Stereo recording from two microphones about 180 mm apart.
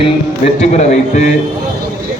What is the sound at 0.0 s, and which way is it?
Speech, 35° left (ahead or behind).